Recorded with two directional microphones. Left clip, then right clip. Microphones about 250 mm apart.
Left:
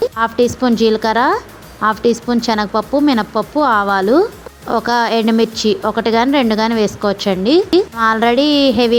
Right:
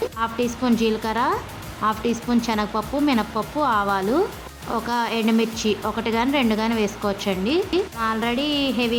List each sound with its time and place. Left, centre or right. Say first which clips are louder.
0.2 s speech: left 10 dB; left